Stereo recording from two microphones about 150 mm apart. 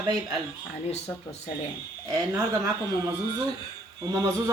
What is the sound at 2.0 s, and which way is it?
Speech, 20° right (ahead or behind).